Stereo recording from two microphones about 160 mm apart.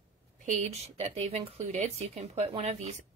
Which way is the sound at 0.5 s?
45° right (ahead or behind).